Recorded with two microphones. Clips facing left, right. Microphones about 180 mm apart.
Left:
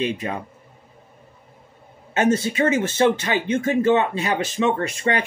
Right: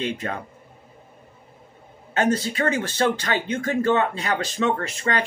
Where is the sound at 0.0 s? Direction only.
15° left (ahead or behind).